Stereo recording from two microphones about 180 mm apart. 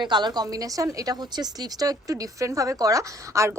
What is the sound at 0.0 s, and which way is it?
A woman's voice, 25° right (ahead or behind).